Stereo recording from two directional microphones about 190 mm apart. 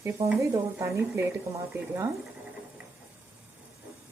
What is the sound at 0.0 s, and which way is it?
A woman's voice, 15° right (ahead or behind).